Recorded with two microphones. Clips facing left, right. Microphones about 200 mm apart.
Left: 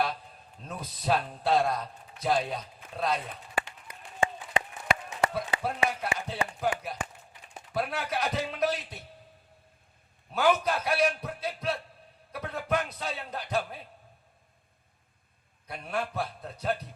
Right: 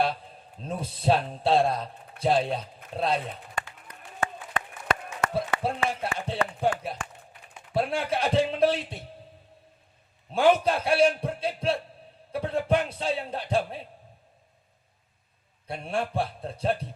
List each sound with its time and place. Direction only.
0.6 s a man's voice: 30° right (ahead or behind)
3.5 s run: 10° left (ahead or behind)
5.3 s a man's voice: 30° right (ahead or behind)
10.3 s a man's voice: 30° right (ahead or behind)
15.6 s a man's voice: 30° right (ahead or behind)